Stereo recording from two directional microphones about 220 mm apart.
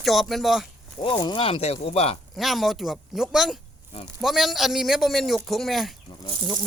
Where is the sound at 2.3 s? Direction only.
Centre (ahead or behind).